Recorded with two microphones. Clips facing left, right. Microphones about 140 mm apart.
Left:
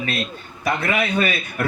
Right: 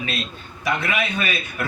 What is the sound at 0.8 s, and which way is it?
Speech, 35° left (ahead or behind).